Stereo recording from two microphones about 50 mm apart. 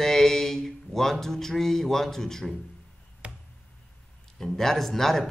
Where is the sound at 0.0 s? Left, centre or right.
Centre.